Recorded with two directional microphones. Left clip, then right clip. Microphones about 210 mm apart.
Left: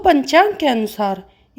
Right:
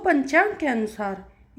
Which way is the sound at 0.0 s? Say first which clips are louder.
Left 7 dB; 55° left (ahead or behind).